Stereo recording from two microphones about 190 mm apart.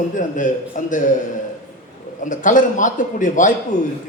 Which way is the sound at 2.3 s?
40° left (ahead or behind).